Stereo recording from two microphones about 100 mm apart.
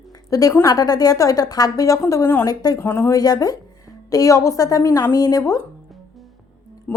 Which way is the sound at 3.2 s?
40° left (ahead or behind).